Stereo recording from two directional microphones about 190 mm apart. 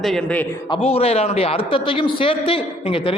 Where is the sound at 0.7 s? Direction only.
30° left (ahead or behind).